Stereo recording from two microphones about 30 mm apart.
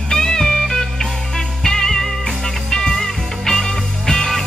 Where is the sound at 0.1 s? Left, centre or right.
Left.